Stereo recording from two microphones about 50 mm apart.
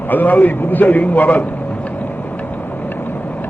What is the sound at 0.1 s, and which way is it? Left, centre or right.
Speech, left.